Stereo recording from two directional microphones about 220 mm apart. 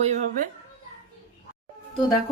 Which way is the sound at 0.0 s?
30° right (ahead or behind).